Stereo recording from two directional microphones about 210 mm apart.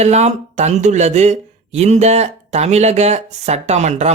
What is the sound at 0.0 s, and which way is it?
Speech, 30° right (ahead or behind).